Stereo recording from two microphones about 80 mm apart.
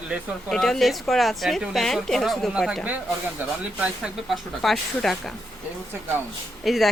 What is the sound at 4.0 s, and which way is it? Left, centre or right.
Speech, centre.